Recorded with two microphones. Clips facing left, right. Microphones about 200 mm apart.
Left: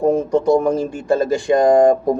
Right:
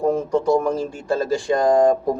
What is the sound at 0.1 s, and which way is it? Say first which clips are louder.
Speech: left 4 dB; 20° left (ahead or behind).